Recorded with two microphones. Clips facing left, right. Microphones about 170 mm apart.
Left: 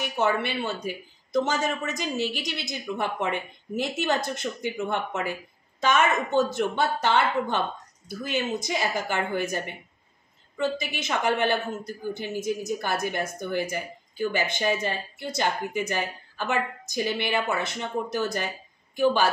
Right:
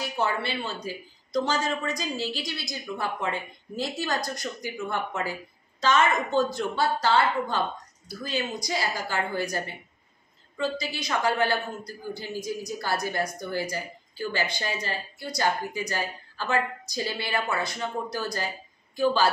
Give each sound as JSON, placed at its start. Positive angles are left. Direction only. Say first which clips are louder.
{"t": 0.8, "sound": "a man's voice", "louder": "left 2 dB", "side_deg": 20}
{"t": 10.6, "sound": "a man's voice", "louder": "left 2 dB", "side_deg": 20}